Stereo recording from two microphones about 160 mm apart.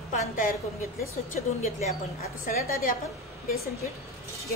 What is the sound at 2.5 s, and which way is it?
Speech, 55° left (ahead or behind).